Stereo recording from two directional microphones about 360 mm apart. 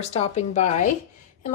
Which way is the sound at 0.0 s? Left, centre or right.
Centre.